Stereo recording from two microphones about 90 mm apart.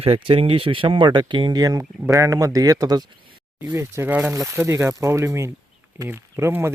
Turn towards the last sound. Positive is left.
turn(degrees=-30)  # may be behind; listen again after turning